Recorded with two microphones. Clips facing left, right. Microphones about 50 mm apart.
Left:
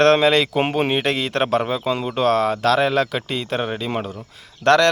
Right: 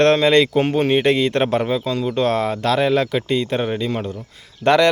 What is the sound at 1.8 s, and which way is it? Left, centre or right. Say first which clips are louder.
Speech: even; centre.